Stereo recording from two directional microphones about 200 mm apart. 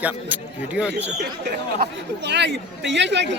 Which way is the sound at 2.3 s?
60° right (ahead or behind).